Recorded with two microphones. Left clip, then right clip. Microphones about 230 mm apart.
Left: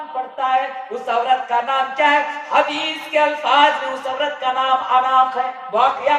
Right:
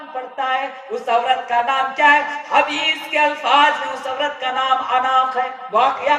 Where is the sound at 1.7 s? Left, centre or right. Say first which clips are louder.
Right 2 dB; right.